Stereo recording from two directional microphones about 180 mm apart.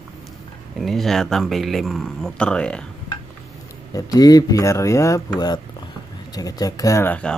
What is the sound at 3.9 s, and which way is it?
Speech, 20° left (ahead or behind).